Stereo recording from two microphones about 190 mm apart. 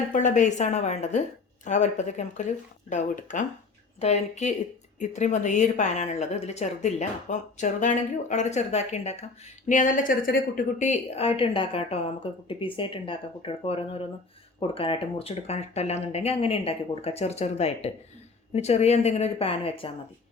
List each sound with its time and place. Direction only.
0.1 s a woman's voice: 40° left (ahead or behind)